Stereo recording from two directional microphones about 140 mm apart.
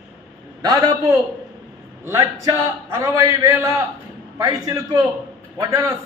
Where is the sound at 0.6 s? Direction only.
25° right (ahead or behind).